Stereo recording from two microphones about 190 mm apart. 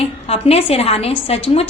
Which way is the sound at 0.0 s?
30° left (ahead or behind).